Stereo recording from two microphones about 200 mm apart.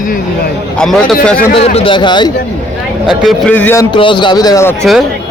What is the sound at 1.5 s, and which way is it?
Speech, 30° left (ahead or behind).